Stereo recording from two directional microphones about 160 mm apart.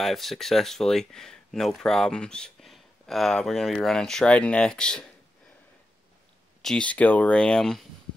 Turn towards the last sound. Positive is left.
turn(degrees=0)  # may be behind; listen again after turning